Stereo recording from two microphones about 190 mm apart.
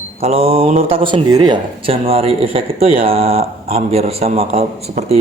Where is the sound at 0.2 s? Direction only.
30° right (ahead or behind).